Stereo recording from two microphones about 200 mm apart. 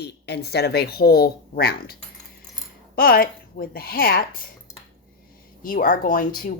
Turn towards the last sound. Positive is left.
turn(degrees=40)  # may be behind; listen again after turning